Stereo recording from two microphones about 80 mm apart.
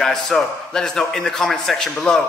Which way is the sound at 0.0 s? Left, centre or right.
Centre.